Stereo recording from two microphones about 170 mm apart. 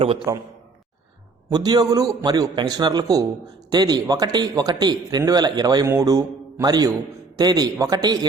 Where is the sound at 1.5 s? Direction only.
25° right (ahead or behind).